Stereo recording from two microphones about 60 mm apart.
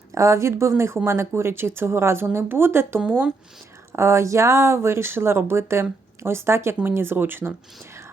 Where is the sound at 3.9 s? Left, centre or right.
Right.